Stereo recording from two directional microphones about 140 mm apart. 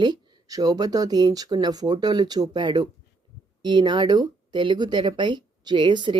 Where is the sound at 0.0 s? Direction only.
25° right (ahead or behind).